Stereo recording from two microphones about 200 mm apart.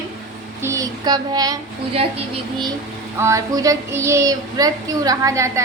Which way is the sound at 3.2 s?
15° right (ahead or behind).